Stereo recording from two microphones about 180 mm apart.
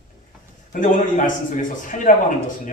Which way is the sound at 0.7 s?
45° left (ahead or behind).